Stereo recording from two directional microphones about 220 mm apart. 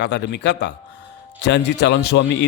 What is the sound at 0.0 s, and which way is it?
Speech, 55° left (ahead or behind).